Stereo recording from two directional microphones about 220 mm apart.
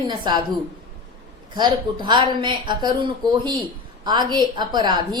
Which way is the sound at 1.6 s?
20° right (ahead or behind).